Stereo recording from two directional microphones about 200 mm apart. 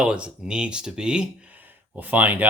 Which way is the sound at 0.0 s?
5° right (ahead or behind).